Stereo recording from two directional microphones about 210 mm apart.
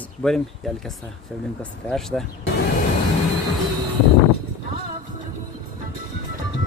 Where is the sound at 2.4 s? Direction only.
50° left (ahead or behind).